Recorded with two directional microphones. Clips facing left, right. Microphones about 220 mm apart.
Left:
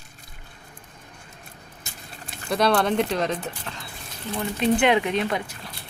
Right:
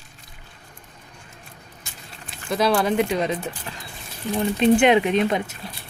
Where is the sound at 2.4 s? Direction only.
5° right (ahead or behind).